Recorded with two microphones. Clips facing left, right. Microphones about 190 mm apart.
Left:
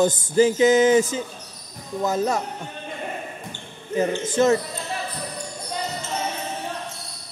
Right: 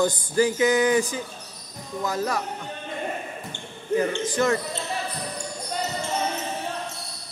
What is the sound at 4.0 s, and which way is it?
Speech, 25° left (ahead or behind).